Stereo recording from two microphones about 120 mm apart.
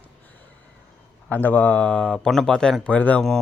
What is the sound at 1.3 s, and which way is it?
Speech, 15° left (ahead or behind).